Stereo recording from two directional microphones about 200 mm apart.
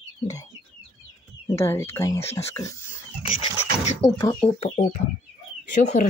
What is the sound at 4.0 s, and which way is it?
Speech, 15° left (ahead or behind).